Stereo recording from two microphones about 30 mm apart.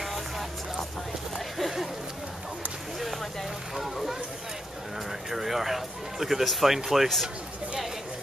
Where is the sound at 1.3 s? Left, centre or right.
Centre.